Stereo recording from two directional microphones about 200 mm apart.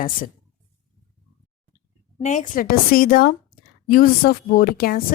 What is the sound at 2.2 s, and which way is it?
A woman's voice, 40° left (ahead or behind).